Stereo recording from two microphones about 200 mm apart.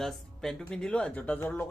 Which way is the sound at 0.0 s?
5° left (ahead or behind).